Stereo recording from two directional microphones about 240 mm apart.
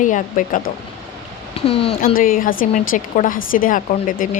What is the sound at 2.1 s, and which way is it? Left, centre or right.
Speech, left.